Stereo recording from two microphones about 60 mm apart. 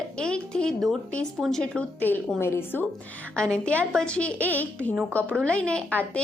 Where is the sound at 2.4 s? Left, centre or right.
Left.